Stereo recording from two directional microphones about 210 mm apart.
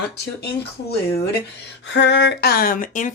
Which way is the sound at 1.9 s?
55° left (ahead or behind).